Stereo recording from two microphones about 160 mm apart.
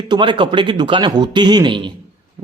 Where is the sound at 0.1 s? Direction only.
30° right (ahead or behind).